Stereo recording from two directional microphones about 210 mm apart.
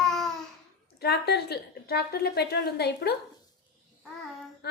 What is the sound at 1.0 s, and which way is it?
A woman's voice, 50° left (ahead or behind).